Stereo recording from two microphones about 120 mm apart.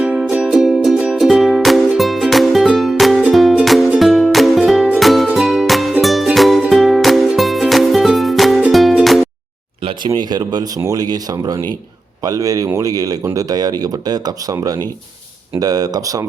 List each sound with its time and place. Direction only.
0.0 s music: 10° right (ahead or behind)
9.8 s speech: 45° right (ahead or behind)